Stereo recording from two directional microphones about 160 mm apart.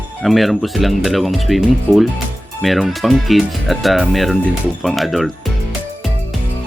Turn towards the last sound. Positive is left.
turn(degrees=0)  # may be behind; listen again after turning